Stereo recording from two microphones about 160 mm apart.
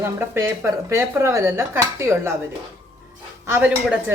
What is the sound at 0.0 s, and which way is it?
Speech, 15° right (ahead or behind).